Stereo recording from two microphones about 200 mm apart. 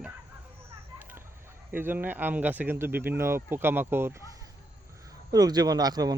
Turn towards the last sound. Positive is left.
turn(degrees=-20)  # may be behind; listen again after turning